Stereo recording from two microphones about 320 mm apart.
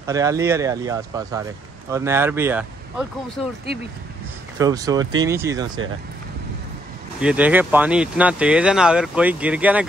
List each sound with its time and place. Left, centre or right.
0.0 s speech: centre
4.6 s speech: centre
7.2 s speech: centre